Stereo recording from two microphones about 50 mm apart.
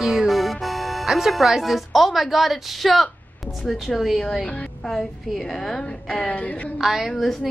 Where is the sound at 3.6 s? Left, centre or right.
Centre.